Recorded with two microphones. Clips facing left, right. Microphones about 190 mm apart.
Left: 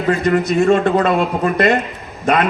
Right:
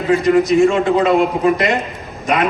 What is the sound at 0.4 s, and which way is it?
Speech, 60° left (ahead or behind).